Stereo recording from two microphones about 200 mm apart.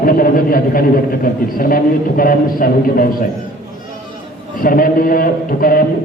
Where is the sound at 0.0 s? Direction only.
45° left (ahead or behind).